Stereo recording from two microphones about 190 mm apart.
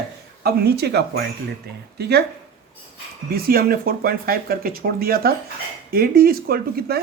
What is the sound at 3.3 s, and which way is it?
Speech, 55° right (ahead or behind).